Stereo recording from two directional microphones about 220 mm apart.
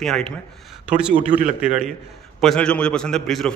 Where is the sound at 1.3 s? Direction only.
35° right (ahead or behind).